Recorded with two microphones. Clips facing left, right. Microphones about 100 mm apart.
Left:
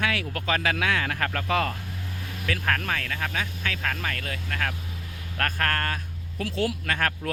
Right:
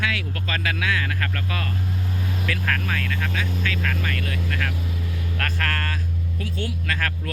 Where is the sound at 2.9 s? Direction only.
30° left (ahead or behind).